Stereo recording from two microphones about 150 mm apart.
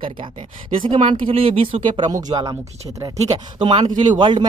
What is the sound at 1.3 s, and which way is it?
Speech, 40° right (ahead or behind).